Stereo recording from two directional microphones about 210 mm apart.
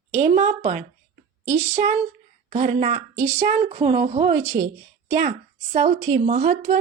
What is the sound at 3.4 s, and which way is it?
A woman's voice, 40° right (ahead or behind).